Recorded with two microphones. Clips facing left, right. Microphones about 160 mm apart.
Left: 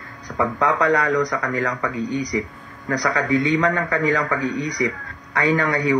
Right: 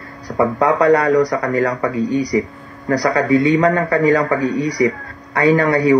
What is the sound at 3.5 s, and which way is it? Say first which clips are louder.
A man's voice: right 6 dB; 45° right (ahead or behind).